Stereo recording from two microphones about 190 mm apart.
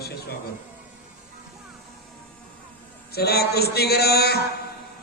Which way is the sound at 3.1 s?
55° left (ahead or behind).